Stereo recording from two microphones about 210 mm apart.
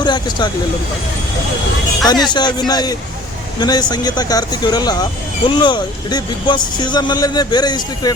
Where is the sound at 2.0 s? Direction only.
20° left (ahead or behind).